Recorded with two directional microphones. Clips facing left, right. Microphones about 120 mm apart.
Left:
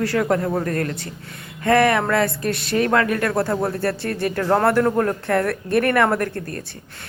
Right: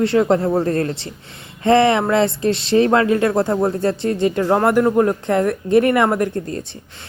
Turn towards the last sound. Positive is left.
turn(degrees=-20)  # may be behind; listen again after turning